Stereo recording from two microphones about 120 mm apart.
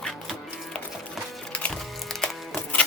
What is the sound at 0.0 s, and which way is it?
Music, centre (ahead or behind).